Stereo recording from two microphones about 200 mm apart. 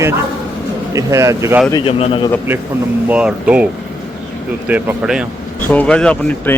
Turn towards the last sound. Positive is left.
turn(degrees=5)  # may be behind; listen again after turning